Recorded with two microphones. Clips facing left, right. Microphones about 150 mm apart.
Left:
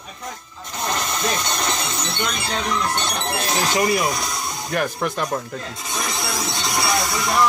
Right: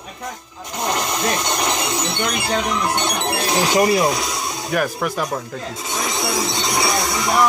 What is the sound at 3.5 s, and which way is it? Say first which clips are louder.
Speech: right 4 dB; 40° right (ahead or behind).